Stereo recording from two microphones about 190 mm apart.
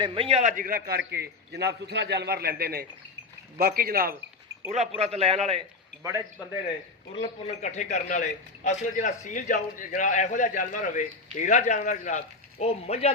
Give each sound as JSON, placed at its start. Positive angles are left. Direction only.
{"t": 0.0, "sound": "a man's voice", "side_deg": -30}
{"t": 4.9, "sound": "a man's voice", "side_deg": -35}
{"t": 6.0, "sound": "speech", "side_deg": -15}
{"t": 7.2, "sound": "a man's voice", "side_deg": 35}